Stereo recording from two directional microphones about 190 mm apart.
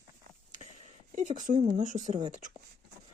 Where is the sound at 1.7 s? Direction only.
45° right (ahead or behind).